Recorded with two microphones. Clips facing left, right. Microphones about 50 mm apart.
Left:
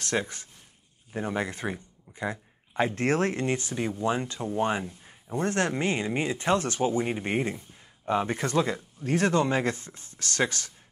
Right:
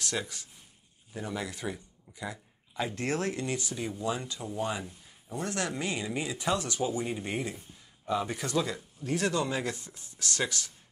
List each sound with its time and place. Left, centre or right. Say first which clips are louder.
0.0 s speech: left 5 dB; left